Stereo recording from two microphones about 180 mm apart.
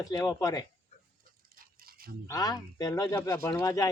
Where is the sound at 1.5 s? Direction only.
55° right (ahead or behind).